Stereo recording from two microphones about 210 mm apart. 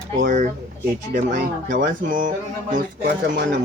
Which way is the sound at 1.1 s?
40° right (ahead or behind).